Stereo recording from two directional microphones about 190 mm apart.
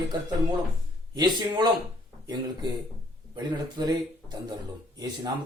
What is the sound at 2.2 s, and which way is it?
Speech, 20° right (ahead or behind).